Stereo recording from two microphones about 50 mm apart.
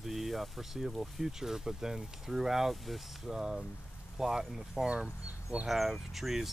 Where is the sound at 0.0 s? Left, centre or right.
Centre.